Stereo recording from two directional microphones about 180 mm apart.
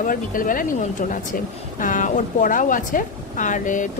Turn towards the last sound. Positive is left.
turn(degrees=45)  # may be behind; listen again after turning